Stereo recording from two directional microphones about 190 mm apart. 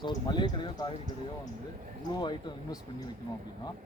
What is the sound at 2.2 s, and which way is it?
Speech, 25° left (ahead or behind).